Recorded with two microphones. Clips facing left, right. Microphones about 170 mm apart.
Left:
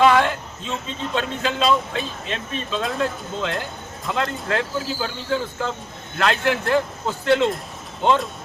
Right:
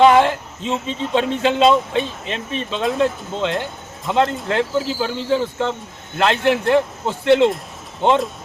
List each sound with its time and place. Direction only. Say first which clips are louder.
0.0 s speech: right 4 dB; 25° right (ahead or behind)